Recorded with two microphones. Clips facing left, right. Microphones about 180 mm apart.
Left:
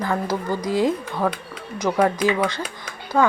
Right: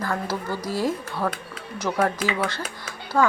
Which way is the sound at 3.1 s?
15° left (ahead or behind).